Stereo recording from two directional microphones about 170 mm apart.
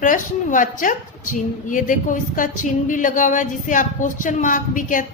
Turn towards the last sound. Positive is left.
turn(degrees=50)  # may be behind; listen again after turning